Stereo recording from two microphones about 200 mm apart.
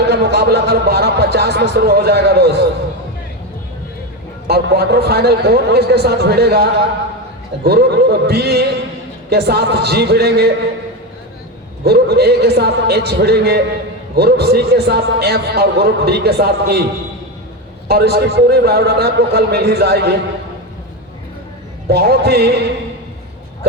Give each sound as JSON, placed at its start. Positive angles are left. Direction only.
{"t": 0.1, "sound": "a man's voice", "side_deg": -55}
{"t": 4.4, "sound": "a man's voice", "side_deg": -55}
{"t": 11.9, "sound": "a man's voice", "side_deg": -50}
{"t": 17.8, "sound": "a man's voice", "side_deg": -55}
{"t": 21.8, "sound": "a man's voice", "side_deg": -50}